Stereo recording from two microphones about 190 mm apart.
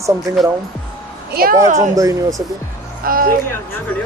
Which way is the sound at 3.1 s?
50° right (ahead or behind).